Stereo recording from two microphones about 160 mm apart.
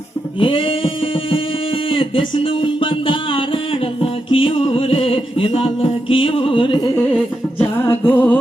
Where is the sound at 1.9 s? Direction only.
35° left (ahead or behind).